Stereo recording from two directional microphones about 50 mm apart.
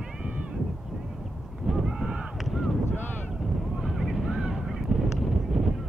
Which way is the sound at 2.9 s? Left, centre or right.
Left.